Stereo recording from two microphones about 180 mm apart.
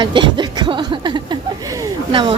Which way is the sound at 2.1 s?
30° right (ahead or behind).